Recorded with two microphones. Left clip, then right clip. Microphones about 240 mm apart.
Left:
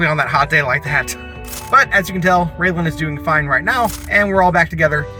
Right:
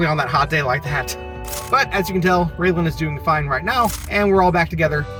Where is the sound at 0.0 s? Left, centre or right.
Centre.